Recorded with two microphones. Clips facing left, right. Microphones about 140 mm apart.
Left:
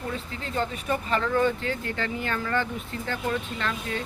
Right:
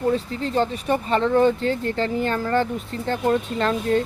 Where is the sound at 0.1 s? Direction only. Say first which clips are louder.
Right 10 dB; 30° right (ahead or behind).